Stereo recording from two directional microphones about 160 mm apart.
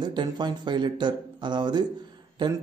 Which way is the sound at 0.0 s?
30° right (ahead or behind).